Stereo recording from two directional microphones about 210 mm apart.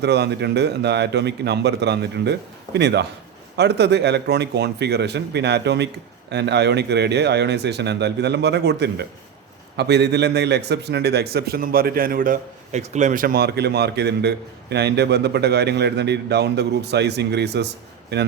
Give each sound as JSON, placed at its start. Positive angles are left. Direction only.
{"t": 0.0, "sound": "a man's voice", "side_deg": -50}